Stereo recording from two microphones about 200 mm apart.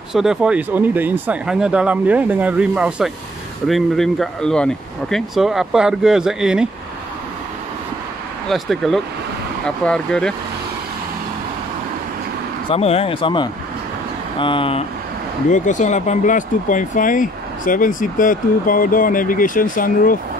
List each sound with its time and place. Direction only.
0.1 s speech: centre (ahead or behind)
8.5 s speech: centre (ahead or behind)
12.6 s speech: 30° left (ahead or behind)
15.5 s speech: 40° left (ahead or behind)